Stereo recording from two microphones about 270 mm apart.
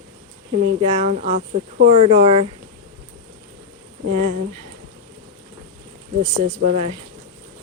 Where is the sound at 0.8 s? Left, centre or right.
Right.